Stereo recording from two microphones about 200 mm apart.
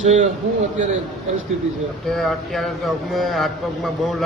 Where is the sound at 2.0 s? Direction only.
Centre (ahead or behind).